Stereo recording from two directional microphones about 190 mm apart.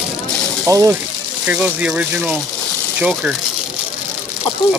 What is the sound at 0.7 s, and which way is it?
Speech, 15° right (ahead or behind).